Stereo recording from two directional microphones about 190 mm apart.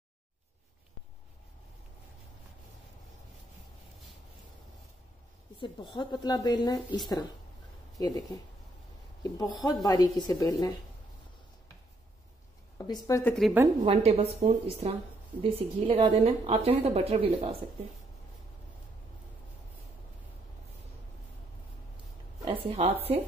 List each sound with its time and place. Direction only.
5.6 s speech: 25° left (ahead or behind)
9.2 s speech: 20° left (ahead or behind)
12.7 s a woman's voice: 20° left (ahead or behind)
13.3 s speech: centre (ahead or behind)
13.8 s a woman's voice: 35° right (ahead or behind)
22.4 s a woman's voice: 25° right (ahead or behind)